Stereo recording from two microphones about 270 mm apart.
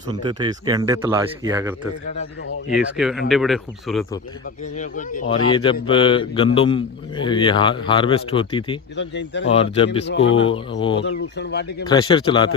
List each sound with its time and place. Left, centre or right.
0.3 s speech: centre
2.7 s speech: centre
4.6 s a man's voice: left
9.0 s speech: left
9.5 s a man's voice: left
10.1 s speech: left
11.9 s speech: centre